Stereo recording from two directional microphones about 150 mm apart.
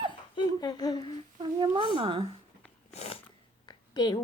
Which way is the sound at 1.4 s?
35° right (ahead or behind).